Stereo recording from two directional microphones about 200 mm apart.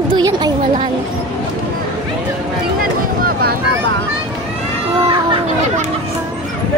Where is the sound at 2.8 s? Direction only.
45° right (ahead or behind).